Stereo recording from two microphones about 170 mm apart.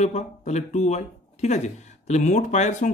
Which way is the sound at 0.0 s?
40° left (ahead or behind).